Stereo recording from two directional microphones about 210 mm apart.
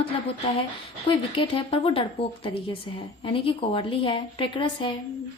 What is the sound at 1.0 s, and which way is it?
A woman's voice, 25° left (ahead or behind).